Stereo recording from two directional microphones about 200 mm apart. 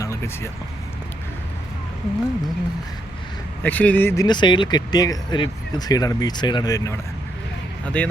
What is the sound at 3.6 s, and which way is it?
Speech, 10° left (ahead or behind).